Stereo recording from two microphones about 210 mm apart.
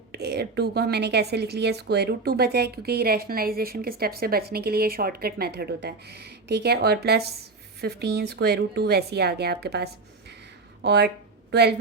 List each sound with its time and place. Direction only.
0.1 s a woman's voice: 50° right (ahead or behind)